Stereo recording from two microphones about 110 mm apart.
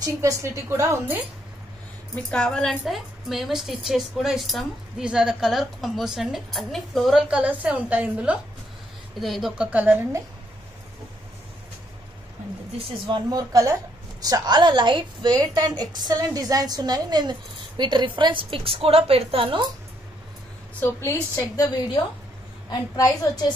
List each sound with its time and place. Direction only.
0.0 s a woman's voice: 30° right (ahead or behind)
2.3 s a woman's voice: 5° left (ahead or behind); by 10.0 s 15° right (ahead or behind)
12.7 s a woman's voice: 45° right (ahead or behind)
13.5 s a woman's voice: 30° right (ahead or behind); by 19.6 s 55° right (ahead or behind)
20.8 s a woman's voice: 25° left (ahead or behind)
22.7 s a woman's voice: 35° left (ahead or behind)